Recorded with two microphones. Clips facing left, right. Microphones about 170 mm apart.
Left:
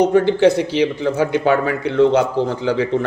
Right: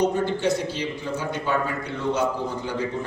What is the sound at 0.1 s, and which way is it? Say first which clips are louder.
A man's voice: left 10 dB; 85° left.